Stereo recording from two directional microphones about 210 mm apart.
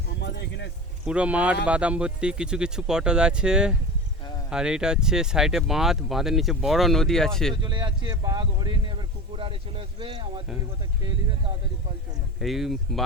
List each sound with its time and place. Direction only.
0.2 s a sound: 55° left (ahead or behind)
1.0 s speech: 5° right (ahead or behind)
7.5 s speech: 20° right (ahead or behind)
12.4 s speech: centre (ahead or behind)